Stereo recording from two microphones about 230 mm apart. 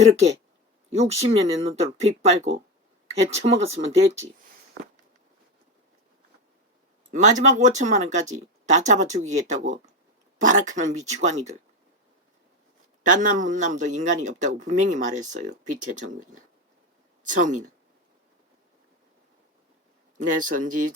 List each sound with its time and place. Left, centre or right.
0.0 s speech: right
4.8 s a sound: right
7.1 s a man's voice: right
13.0 s a man's voice: right
20.1 s a man's voice: right